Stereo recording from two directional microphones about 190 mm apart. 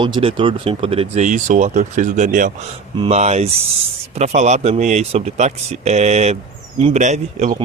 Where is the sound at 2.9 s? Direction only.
30° right (ahead or behind).